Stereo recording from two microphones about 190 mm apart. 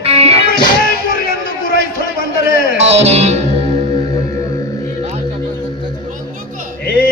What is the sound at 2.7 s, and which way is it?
Music, 35° right (ahead or behind).